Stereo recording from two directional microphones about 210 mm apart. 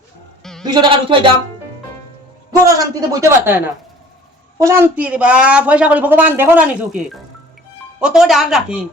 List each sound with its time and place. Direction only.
0.6 s speech: 20° right (ahead or behind)
2.6 s a woman's voice: 15° right (ahead or behind)